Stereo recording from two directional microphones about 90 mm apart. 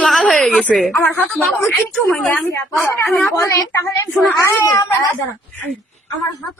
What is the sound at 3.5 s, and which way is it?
Speech, 30° left (ahead or behind).